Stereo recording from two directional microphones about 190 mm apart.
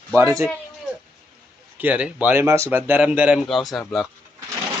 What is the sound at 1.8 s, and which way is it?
Speech, 10° right (ahead or behind).